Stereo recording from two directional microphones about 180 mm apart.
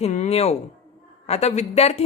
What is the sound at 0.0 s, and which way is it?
Speech, 40° left (ahead or behind).